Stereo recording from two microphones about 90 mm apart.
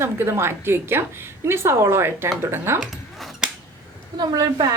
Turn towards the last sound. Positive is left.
turn(degrees=-45)  # may be behind; listen again after turning